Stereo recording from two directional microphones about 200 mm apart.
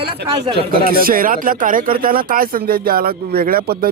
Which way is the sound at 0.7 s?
45° right (ahead or behind).